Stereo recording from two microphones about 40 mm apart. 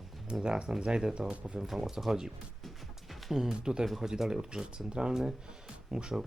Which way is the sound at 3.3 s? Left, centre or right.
Centre.